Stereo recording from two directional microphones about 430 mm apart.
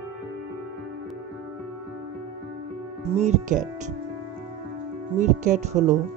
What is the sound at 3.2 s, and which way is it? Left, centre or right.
Speech, centre.